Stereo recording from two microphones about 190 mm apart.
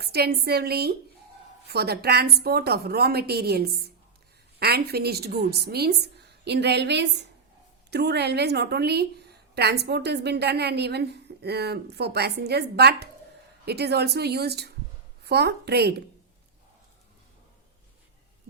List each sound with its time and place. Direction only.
0.0 s a woman's voice: 55° right (ahead or behind)